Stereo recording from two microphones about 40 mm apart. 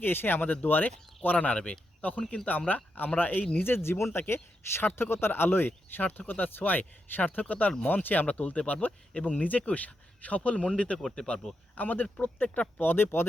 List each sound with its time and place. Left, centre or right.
0.0 s speech: left
3.6 s speech: left
4.9 s speech: left
6.1 s speech: left
7.4 s speech: left
9.1 s speech: left
11.7 s speech: left
12.8 s speech: left